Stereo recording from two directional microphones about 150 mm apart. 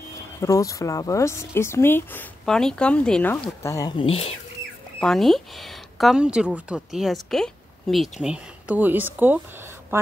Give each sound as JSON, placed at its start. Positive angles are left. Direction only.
{"t": 0.4, "sound": "speech", "side_deg": 20}
{"t": 2.4, "sound": "a woman's voice", "side_deg": 5}
{"t": 3.6, "sound": "speech", "side_deg": 25}
{"t": 4.0, "sound": "speech", "side_deg": 40}
{"t": 5.0, "sound": "a woman's voice", "side_deg": 0}